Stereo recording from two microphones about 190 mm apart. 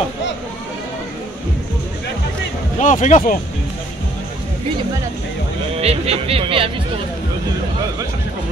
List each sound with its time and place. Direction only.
2.8 s speech: 40° left (ahead or behind)
5.8 s speech: 30° right (ahead or behind)